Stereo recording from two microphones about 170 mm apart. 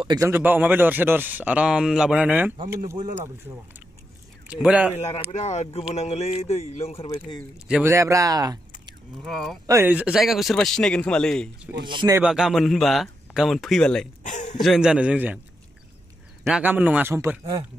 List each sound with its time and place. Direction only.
0.0 s a man's voice: 25° right (ahead or behind)
0.3 s a man's voice: 10° right (ahead or behind)
4.5 s a man's voice: 5° right (ahead or behind)
4.9 s speech: 40° left (ahead or behind)
7.5 s speech: 5° right (ahead or behind); by 8.9 s 25° right (ahead or behind)
9.2 s a man's voice: centre (ahead or behind)
11.8 s speech: 25° right (ahead or behind)
12.2 s a man's voice: 5° right (ahead or behind)
14.2 s a man's voice: 45° left (ahead or behind)
14.6 s a man's voice: centre (ahead or behind)
16.4 s a man's voice: 5° right (ahead or behind)